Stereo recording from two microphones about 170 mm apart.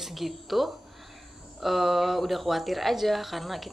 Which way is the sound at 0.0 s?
Centre (ahead or behind).